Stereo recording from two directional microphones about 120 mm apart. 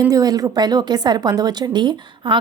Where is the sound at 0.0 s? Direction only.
30° right (ahead or behind).